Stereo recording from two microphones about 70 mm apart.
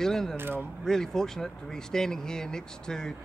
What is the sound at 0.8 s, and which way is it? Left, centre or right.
Speech, centre.